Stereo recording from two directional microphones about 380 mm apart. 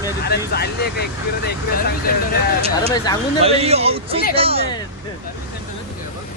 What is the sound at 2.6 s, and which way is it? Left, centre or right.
A man's voice, centre.